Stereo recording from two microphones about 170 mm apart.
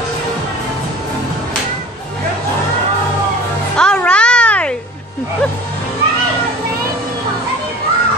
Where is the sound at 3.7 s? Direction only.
5° left (ahead or behind).